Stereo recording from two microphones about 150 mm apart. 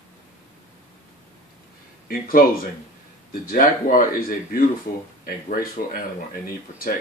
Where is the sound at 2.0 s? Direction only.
75° left (ahead or behind).